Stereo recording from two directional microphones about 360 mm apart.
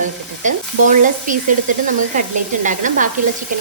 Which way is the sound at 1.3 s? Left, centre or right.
Right.